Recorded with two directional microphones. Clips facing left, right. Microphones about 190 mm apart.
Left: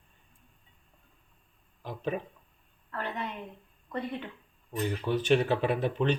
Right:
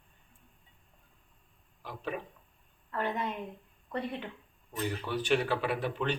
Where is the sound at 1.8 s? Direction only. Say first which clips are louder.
Left 4 dB; 25° left (ahead or behind).